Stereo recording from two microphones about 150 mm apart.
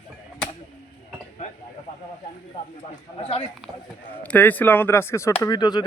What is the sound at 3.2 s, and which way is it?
Speech, 40° left (ahead or behind).